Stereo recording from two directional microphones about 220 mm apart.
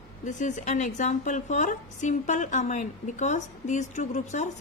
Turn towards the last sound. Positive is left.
turn(degrees=35)  # may be behind; listen again after turning